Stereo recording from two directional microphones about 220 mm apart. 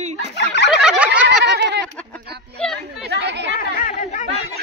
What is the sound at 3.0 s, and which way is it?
Chatter, 50° right (ahead or behind).